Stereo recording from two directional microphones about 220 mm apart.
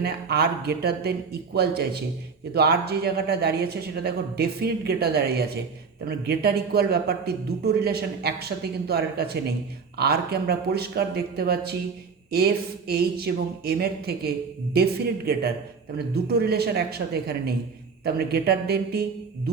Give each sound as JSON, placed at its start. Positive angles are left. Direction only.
{"t": 0.0, "sound": "a man's voice", "side_deg": -45}